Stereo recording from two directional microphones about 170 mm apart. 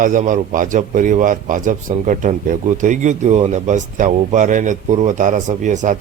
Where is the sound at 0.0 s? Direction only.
50° right (ahead or behind).